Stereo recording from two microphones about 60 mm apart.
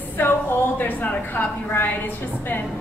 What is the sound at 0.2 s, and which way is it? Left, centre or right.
A woman's voice, left.